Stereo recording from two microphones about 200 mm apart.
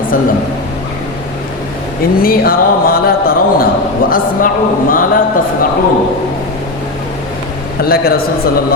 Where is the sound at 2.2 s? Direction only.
45° left (ahead or behind).